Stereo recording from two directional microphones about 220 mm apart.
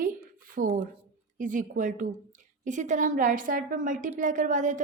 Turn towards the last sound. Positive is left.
turn(degrees=-35)  # may be behind; listen again after turning